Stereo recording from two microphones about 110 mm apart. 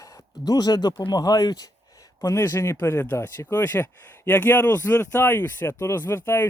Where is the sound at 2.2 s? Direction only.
25° left (ahead or behind).